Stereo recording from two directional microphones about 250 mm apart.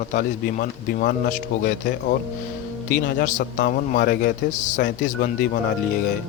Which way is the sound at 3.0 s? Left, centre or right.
Left.